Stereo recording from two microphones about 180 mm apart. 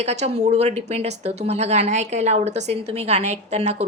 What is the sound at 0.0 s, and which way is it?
A woman's voice, 35° right (ahead or behind).